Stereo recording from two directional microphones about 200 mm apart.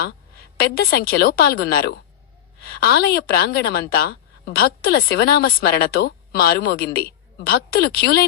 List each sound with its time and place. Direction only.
0.7 s a woman's voice: 50° left (ahead or behind)